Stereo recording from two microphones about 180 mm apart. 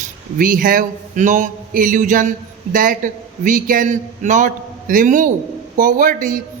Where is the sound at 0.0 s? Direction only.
50° right (ahead or behind).